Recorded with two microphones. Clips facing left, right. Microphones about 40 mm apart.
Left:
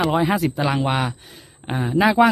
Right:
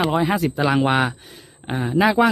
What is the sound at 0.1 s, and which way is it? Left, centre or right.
Speech, centre.